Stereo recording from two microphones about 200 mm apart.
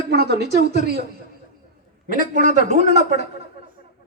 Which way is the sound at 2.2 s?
40° right (ahead or behind).